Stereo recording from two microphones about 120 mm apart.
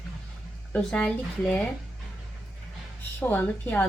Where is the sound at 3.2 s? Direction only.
15° left (ahead or behind).